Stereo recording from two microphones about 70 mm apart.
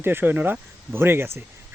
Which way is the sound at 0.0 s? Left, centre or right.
Right.